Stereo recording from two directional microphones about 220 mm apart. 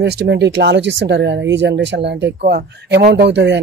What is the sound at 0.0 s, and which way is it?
Speech, 50° right (ahead or behind).